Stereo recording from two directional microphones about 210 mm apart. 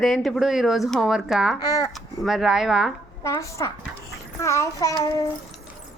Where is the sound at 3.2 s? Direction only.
15° left (ahead or behind).